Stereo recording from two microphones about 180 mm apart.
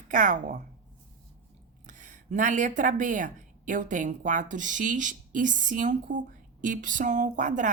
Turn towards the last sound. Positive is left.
turn(degrees=-45)  # may be behind; listen again after turning